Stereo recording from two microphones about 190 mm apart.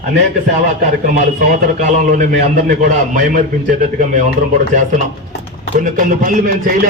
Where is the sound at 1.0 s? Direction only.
40° right (ahead or behind).